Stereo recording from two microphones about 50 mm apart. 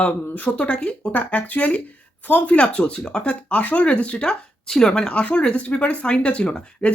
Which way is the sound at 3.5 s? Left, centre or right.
Left.